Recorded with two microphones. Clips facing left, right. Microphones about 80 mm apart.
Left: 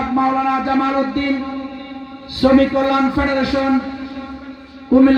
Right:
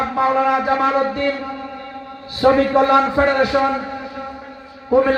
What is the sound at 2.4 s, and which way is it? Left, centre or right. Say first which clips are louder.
A man's voice: left 1 dB; right.